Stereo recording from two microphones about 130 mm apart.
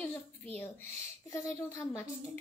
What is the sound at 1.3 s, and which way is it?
Speech, 25° left (ahead or behind).